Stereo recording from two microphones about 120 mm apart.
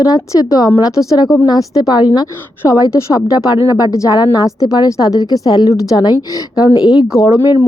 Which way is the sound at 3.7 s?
30° left (ahead or behind).